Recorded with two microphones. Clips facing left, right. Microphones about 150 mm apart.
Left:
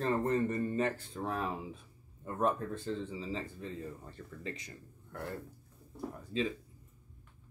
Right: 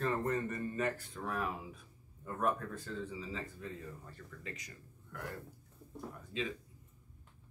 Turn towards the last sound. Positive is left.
turn(degrees=35)  # may be behind; listen again after turning